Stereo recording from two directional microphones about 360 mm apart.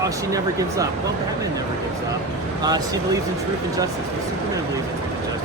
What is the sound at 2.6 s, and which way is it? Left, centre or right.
Speech, centre.